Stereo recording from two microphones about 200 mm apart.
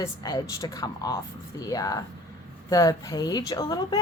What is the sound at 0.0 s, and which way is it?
A woman's voice, 20° left (ahead or behind).